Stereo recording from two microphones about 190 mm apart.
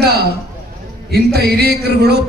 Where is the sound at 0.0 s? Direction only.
55° right (ahead or behind).